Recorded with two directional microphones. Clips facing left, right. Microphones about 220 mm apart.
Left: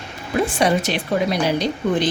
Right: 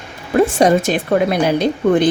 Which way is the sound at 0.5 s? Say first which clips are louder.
Right 6 dB; 45° right (ahead or behind).